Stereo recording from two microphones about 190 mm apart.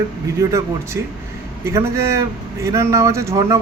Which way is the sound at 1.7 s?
15° right (ahead or behind).